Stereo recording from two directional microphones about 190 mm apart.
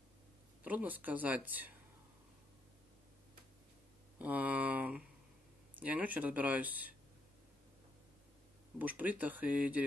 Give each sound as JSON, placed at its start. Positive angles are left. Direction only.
{"t": 0.7, "sound": "speech", "side_deg": -10}
{"t": 4.2, "sound": "speech", "side_deg": -10}
{"t": 8.7, "sound": "speech", "side_deg": -10}